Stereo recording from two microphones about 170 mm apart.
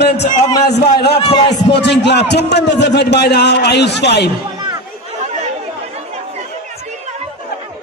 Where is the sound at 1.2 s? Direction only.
35° left (ahead or behind).